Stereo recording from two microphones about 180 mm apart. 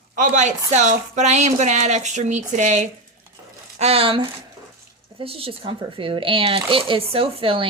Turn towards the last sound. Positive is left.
turn(degrees=-30)  # may be behind; listen again after turning